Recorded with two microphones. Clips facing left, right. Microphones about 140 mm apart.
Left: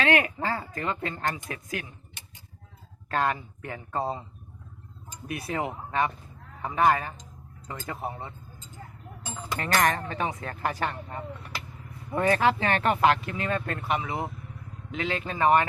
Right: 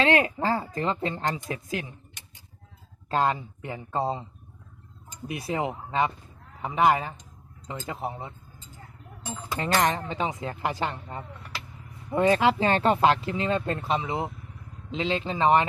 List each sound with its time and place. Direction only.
0.0 s speech: 25° right (ahead or behind)
3.1 s speech: 25° right (ahead or behind)
9.5 s speech: 20° right (ahead or behind)